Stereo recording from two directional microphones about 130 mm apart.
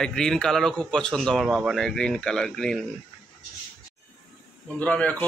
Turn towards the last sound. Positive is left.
turn(degrees=10)  # may be behind; listen again after turning